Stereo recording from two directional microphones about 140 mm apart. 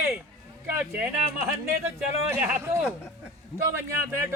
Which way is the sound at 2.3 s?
10° right (ahead or behind).